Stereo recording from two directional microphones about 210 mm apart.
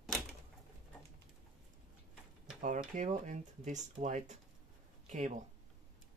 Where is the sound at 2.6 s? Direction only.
40° right (ahead or behind).